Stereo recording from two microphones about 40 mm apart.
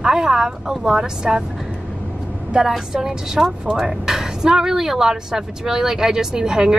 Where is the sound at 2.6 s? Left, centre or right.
Centre.